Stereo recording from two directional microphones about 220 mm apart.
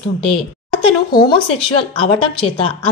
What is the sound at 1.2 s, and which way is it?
A woman's voice, 25° left (ahead or behind).